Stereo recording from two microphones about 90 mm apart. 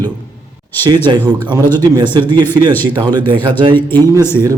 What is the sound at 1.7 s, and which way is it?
Speech, 55° right (ahead or behind).